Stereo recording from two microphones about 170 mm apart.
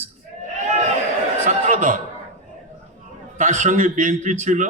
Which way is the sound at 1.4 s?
50° right (ahead or behind).